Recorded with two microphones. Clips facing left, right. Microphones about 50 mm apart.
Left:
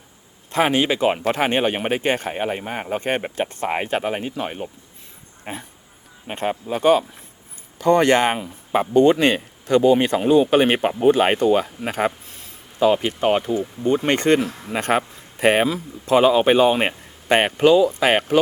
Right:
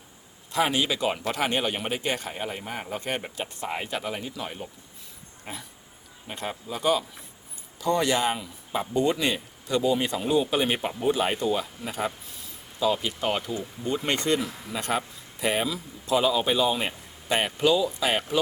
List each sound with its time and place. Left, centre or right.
0.5 s speech: left